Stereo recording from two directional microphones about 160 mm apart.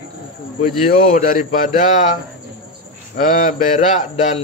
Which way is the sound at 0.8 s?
55° left (ahead or behind).